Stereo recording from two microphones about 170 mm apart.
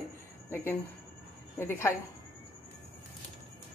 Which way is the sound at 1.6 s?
15° left (ahead or behind).